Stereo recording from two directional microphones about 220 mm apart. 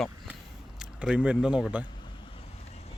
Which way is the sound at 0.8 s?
5° right (ahead or behind).